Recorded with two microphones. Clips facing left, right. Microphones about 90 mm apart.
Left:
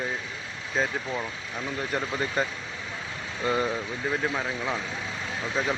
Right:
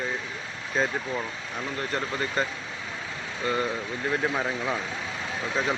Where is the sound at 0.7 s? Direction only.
Centre (ahead or behind).